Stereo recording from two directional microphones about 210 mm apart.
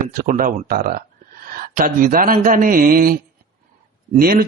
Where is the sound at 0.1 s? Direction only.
40° right (ahead or behind).